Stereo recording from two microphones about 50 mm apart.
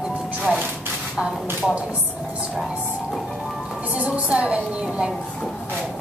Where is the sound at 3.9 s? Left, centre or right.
Right.